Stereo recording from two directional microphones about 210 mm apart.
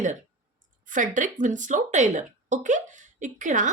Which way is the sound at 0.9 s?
40° right (ahead or behind).